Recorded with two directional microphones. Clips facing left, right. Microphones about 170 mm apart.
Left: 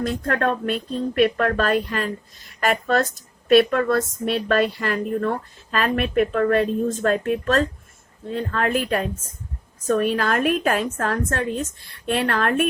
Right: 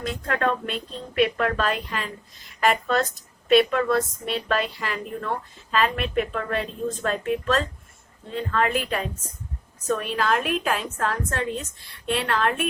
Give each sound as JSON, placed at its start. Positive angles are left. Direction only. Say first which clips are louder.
{"t": 0.0, "sound": "speech", "louder": "left 3 dB", "side_deg": 45}